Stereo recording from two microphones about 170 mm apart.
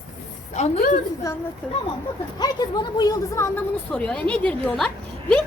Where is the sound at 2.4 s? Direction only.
25° left (ahead or behind); by 5.4 s 5° left (ahead or behind).